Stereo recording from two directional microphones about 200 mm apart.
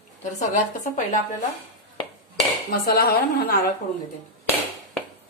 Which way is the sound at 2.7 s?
45° left (ahead or behind).